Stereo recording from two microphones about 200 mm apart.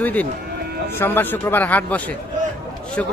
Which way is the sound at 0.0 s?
10° left (ahead or behind).